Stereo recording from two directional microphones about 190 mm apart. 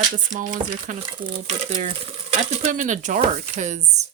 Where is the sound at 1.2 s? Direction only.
35° right (ahead or behind).